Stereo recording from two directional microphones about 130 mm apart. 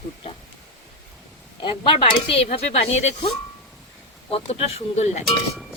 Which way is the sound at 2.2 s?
50° left (ahead or behind).